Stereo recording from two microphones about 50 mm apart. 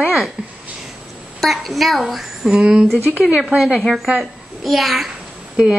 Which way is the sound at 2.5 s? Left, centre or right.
Right.